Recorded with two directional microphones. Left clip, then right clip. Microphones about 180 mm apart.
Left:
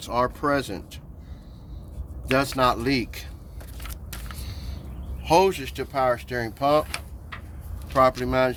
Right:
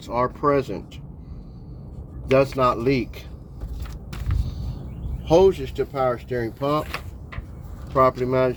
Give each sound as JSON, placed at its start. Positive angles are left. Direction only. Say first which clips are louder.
{"t": 0.0, "sound": "speech", "louder": "right 2 dB", "side_deg": 35}
{"t": 2.4, "sound": "speech", "louder": "even", "side_deg": 40}
{"t": 5.2, "sound": "speech", "louder": "right 3 dB", "side_deg": 40}
{"t": 8.2, "sound": "speech", "louder": "right 2 dB", "side_deg": 35}